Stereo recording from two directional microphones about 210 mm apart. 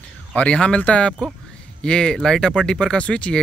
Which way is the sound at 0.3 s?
5° left (ahead or behind).